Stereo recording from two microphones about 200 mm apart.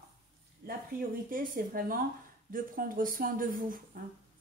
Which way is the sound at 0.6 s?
45° right (ahead or behind).